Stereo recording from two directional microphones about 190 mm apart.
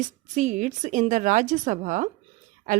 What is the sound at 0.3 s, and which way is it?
Speech, 40° right (ahead or behind).